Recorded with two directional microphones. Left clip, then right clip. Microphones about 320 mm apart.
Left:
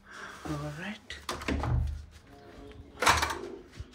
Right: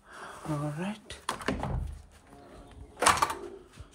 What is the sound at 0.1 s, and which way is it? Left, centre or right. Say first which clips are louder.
Speech: right 1 dB; centre.